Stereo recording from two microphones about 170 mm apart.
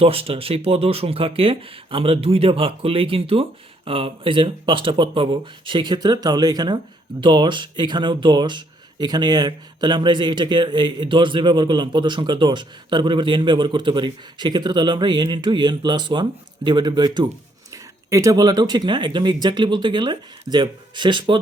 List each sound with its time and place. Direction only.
0.0 s speech: 35° right (ahead or behind)